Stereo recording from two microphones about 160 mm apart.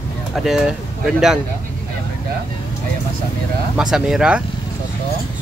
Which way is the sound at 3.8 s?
5° right (ahead or behind).